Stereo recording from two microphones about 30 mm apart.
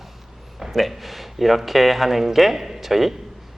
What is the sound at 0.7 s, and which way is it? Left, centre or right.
A man's voice, centre.